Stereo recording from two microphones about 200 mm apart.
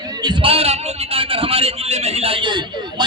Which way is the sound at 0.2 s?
25° right (ahead or behind).